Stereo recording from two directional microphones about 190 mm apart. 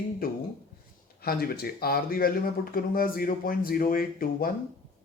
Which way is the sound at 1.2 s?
55° left (ahead or behind).